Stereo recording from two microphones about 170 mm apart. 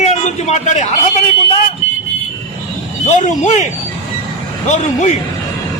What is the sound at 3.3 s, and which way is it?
Speech, 45° left (ahead or behind).